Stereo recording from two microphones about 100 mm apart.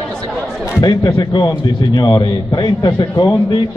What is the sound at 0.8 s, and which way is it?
A man's voice, 45° left (ahead or behind).